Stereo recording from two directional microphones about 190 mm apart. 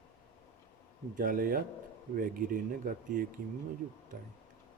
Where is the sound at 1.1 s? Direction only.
45° right (ahead or behind).